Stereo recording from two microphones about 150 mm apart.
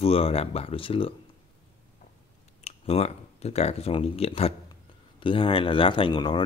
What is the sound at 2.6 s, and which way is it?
Speech, 45° left (ahead or behind).